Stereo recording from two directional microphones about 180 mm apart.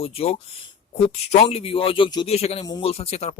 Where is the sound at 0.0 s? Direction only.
35° left (ahead or behind).